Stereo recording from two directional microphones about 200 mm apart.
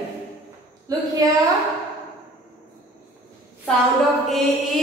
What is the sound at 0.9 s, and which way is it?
Speech, 15° right (ahead or behind).